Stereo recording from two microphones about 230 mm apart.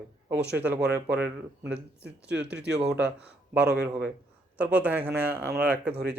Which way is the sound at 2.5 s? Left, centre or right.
Right.